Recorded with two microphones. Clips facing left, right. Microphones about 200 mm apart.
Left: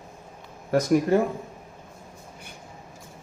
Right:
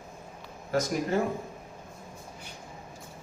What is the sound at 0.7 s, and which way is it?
Speech, 60° left (ahead or behind).